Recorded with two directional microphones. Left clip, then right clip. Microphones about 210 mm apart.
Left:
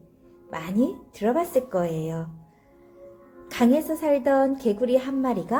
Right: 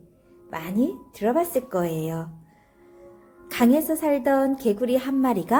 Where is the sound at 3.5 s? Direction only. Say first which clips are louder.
Right 1 dB; 20° right (ahead or behind).